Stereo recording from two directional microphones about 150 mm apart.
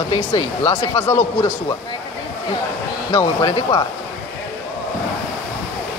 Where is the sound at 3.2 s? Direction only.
25° left (ahead or behind).